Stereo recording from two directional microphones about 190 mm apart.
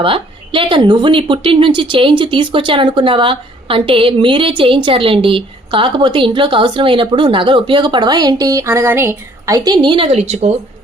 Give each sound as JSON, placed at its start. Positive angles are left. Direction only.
{"t": 0.0, "sound": "a woman's voice", "side_deg": -25}